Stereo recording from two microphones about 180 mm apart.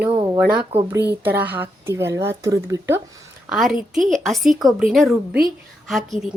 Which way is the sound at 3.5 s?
Centre (ahead or behind).